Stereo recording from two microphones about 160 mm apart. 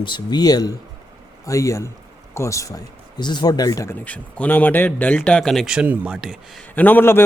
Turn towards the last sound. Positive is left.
turn(degrees=15)  # may be behind; listen again after turning